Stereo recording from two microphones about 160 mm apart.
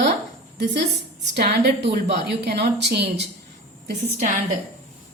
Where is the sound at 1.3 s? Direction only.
90° right.